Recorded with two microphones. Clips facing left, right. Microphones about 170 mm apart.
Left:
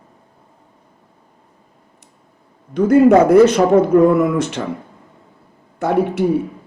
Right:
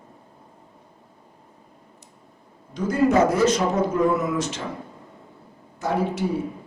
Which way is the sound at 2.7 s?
60° left (ahead or behind).